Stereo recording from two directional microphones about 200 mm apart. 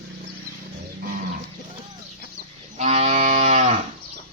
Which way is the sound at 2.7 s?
35° right (ahead or behind).